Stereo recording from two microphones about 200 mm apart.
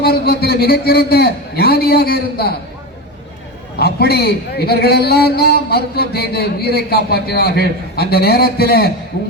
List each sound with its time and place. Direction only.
0.0 s a man's voice: 50° left (ahead or behind)
3.8 s a man's voice: 50° left (ahead or behind)